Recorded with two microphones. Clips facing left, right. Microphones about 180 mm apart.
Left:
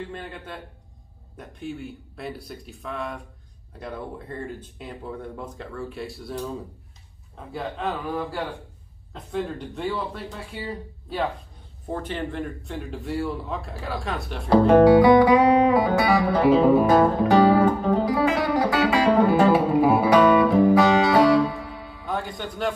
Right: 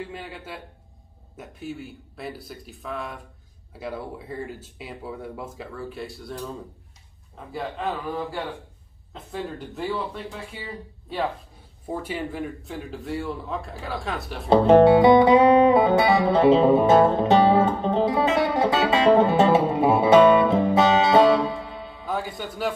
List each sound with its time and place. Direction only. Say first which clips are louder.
0.1 s a man's voice: left 1 dB; 5° right (ahead or behind)
7.5 s speech: even; centre (ahead or behind)
11.9 s speech: even; 5° right (ahead or behind)
14.5 s music: even; 25° right (ahead or behind)
22.0 s a man's voice: even; 5° right (ahead or behind)